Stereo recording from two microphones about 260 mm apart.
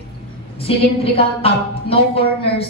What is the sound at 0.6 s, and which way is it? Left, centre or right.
A woman's voice, left.